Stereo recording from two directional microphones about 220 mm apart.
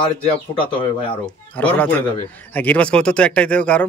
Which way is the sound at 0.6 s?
25° left (ahead or behind).